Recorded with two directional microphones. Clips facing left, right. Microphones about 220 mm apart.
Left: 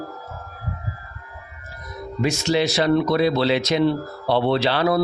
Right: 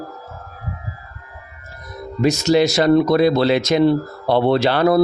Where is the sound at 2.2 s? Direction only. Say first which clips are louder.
Right 6 dB; 40° right (ahead or behind).